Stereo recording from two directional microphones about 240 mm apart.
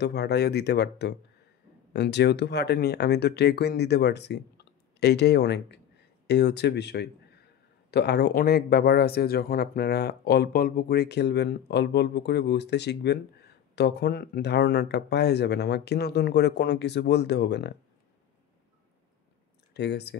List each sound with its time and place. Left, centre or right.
0.0 s speech: left
19.7 s speech: left